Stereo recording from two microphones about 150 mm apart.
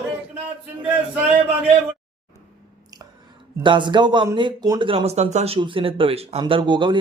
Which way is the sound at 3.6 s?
30° right (ahead or behind).